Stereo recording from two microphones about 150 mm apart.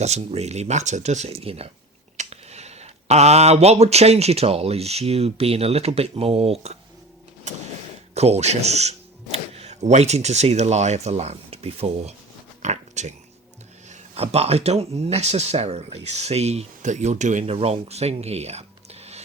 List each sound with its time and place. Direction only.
0.0 s speech: 45° right (ahead or behind)
8.1 s speech: 45° right (ahead or behind)
12.6 s a sound: 50° right (ahead or behind)
13.9 s speech: 45° right (ahead or behind)
17.5 s speech: 45° right (ahead or behind)